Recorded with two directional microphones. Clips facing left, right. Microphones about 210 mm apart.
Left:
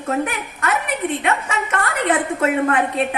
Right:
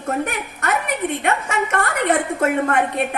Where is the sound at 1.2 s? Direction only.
45° right (ahead or behind).